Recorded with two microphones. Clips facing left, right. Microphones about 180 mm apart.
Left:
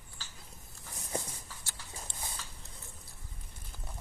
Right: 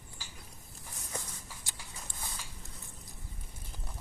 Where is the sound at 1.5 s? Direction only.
15° right (ahead or behind).